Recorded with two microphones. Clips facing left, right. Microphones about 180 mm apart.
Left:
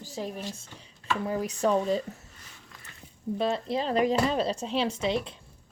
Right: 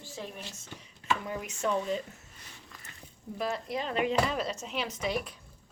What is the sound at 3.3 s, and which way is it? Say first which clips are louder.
A woman's voice: left 5 dB; 30° left (ahead or behind).